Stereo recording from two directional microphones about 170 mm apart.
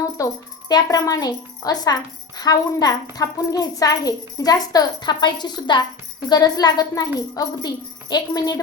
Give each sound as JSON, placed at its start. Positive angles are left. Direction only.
{"t": 0.2, "sound": "a woman's voice", "side_deg": 20}
{"t": 8.1, "sound": "a woman's voice", "side_deg": 20}